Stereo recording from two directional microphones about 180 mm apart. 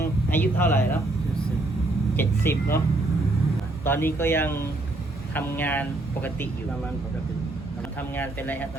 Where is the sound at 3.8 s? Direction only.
10° left (ahead or behind).